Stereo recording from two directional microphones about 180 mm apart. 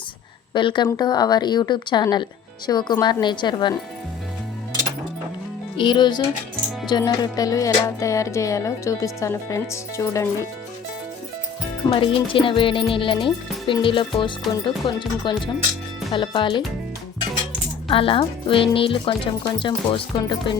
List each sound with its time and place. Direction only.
0.5 s speech: 25° left (ahead or behind)
5.7 s speech: 25° left (ahead or behind)
11.9 s speech: 30° left (ahead or behind)
17.8 s speech: 30° left (ahead or behind)